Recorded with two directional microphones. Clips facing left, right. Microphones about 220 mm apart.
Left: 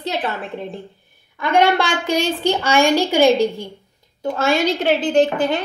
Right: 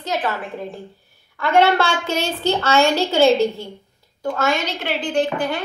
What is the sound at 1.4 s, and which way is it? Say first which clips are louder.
A woman's voice: even; 15° left (ahead or behind).